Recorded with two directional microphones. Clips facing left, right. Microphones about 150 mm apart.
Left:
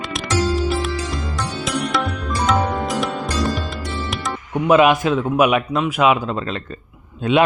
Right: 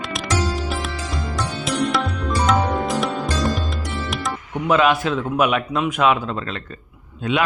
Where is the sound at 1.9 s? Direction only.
Centre (ahead or behind).